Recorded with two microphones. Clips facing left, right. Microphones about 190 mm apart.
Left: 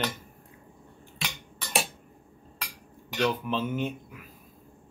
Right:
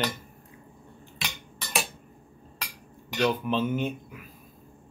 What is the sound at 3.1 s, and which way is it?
Speech, 5° right (ahead or behind).